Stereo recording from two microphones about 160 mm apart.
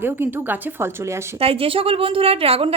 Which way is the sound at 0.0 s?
15° right (ahead or behind).